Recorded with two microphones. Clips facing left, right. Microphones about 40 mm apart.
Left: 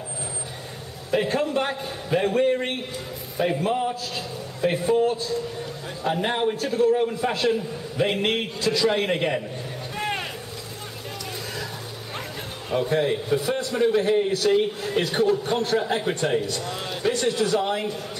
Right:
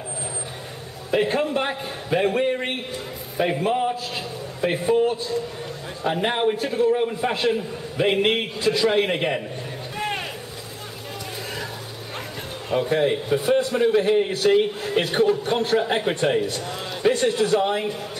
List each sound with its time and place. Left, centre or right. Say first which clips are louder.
1.1 s a man's voice: right 1 dB; right
9.9 s a sound: right 1 dB; centre
12.6 s a man's voice: right 2 dB; centre
13.4 s a man's voice: right 6 dB; right
13.7 s a man's voice: left 2 dB; centre
14.3 s a man's voice: right 2 dB; right